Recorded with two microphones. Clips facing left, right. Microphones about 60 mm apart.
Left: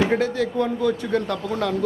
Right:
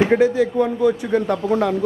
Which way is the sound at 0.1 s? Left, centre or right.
Centre.